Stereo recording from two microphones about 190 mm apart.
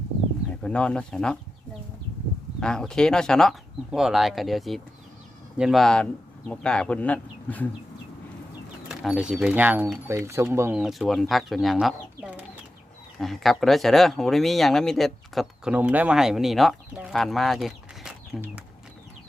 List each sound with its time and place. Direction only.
0.5 s speech: 5° left (ahead or behind)
2.6 s speech: 5° left (ahead or behind)
8.9 s speech: 5° right (ahead or behind)